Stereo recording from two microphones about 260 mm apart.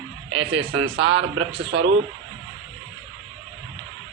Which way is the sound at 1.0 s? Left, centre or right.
Right.